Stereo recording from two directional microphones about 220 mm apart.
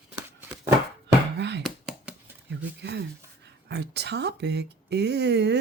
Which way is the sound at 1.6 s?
5° right (ahead or behind).